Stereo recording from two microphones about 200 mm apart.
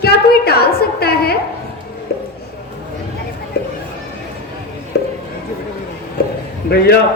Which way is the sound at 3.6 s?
50° left (ahead or behind).